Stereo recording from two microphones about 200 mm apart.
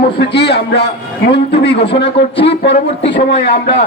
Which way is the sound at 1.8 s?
25° left (ahead or behind).